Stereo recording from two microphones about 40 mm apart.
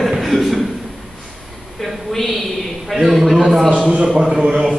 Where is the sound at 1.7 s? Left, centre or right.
Centre.